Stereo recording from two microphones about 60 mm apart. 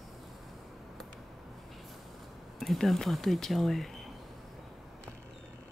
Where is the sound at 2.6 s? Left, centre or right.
Centre.